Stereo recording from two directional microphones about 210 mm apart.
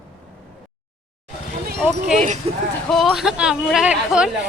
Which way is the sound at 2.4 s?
30° right (ahead or behind).